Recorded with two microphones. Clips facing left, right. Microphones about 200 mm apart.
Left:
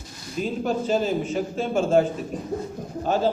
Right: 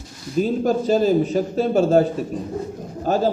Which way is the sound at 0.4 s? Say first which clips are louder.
Right 4 dB; 40° right (ahead or behind).